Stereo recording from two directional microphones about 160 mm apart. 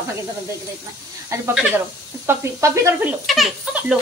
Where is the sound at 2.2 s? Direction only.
20° right (ahead or behind).